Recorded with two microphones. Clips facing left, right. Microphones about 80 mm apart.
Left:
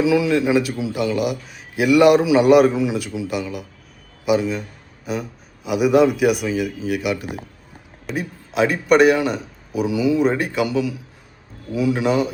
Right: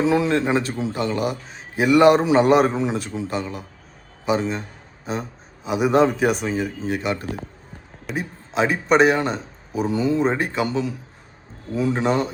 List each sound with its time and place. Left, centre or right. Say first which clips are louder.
0.0 s a man's voice: left 2 dB; right